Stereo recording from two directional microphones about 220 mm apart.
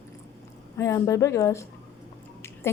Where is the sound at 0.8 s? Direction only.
15° left (ahead or behind).